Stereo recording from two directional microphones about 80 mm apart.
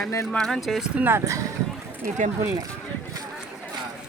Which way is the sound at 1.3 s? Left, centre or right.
Right.